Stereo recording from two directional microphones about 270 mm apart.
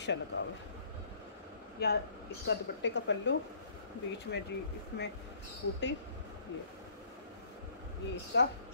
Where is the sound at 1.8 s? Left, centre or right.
Left.